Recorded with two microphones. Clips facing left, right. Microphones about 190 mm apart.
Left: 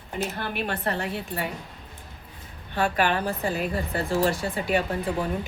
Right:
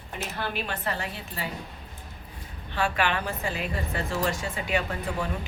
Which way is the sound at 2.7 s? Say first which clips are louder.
Left 3 dB; 40° left (ahead or behind).